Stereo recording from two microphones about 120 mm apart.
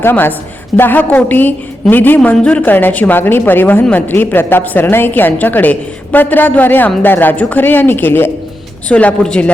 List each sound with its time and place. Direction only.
0.0 s a woman's voice: 15° left (ahead or behind)